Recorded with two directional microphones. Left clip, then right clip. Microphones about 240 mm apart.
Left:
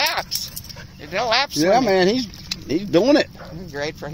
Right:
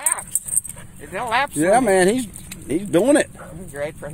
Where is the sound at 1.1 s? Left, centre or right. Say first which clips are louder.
Left 1 dB; left.